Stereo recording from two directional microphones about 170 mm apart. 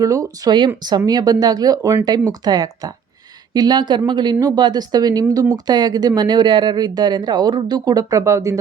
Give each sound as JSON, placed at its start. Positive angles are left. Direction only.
{"t": 0.0, "sound": "speech", "side_deg": -20}